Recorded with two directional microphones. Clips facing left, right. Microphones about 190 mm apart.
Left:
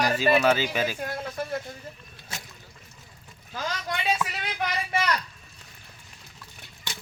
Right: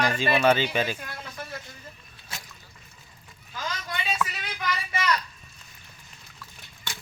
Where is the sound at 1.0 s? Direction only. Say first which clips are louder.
Left 8 dB; 50° left (ahead or behind).